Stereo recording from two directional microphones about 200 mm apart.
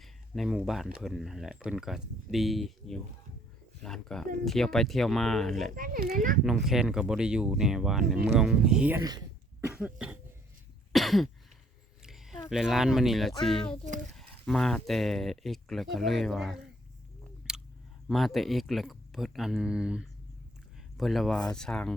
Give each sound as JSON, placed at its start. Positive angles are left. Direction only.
{"t": 0.0, "sound": "speech", "side_deg": 0}
{"t": 5.7, "sound": "speech", "side_deg": -45}
{"t": 6.4, "sound": "speech", "side_deg": 0}
{"t": 9.6, "sound": "cough", "side_deg": -10}
{"t": 10.9, "sound": "throat clearing", "side_deg": 0}
{"t": 12.0, "sound": "a sound", "side_deg": 0}
{"t": 12.5, "sound": "speech", "side_deg": 0}
{"t": 18.1, "sound": "speech", "side_deg": 0}